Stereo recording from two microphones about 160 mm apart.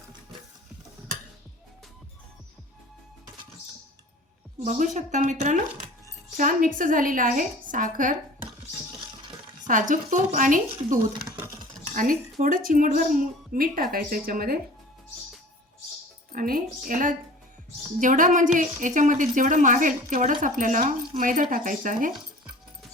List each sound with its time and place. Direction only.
4.6 s a woman's voice: 50° right (ahead or behind)
9.6 s a woman's voice: 55° right (ahead or behind)
11.9 s a woman's voice: 60° right (ahead or behind)
16.3 s a woman's voice: 60° right (ahead or behind)